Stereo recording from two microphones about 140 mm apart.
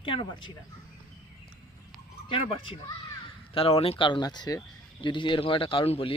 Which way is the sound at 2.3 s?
45° left (ahead or behind).